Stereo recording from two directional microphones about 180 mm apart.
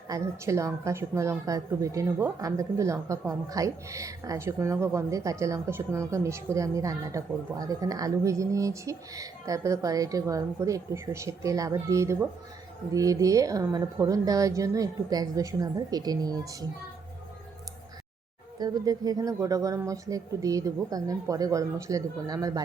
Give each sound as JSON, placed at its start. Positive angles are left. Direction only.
{"t": 0.1, "sound": "a woman's voice", "side_deg": -15}
{"t": 18.6, "sound": "speech", "side_deg": -20}